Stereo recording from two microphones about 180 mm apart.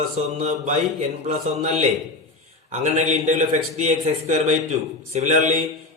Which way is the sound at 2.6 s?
40° right (ahead or behind).